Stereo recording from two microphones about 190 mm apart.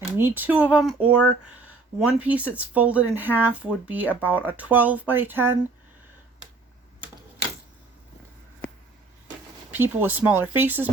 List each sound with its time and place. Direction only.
0.2 s speech: 10° right (ahead or behind)
9.7 s speech: 10° right (ahead or behind)